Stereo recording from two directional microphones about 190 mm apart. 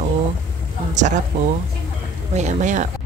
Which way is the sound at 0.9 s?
40° right (ahead or behind).